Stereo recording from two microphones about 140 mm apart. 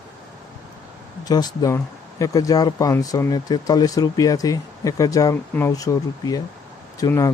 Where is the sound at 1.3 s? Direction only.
30° left (ahead or behind).